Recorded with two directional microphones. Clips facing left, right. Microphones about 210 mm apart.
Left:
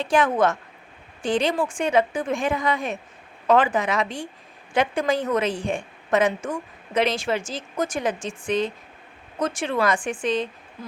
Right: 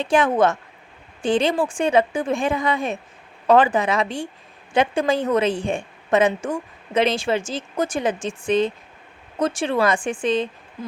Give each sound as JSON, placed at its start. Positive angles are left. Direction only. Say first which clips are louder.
{"t": 0.0, "sound": "a woman's voice", "louder": "right 2 dB", "side_deg": -25}